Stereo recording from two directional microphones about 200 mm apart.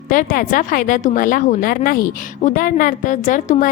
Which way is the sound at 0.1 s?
40° left (ahead or behind).